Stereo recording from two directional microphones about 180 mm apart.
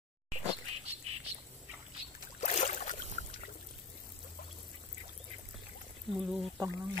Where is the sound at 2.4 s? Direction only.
40° left (ahead or behind).